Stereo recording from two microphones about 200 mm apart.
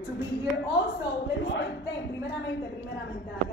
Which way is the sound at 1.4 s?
60° left (ahead or behind).